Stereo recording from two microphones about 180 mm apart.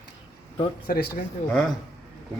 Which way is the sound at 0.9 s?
55° left (ahead or behind).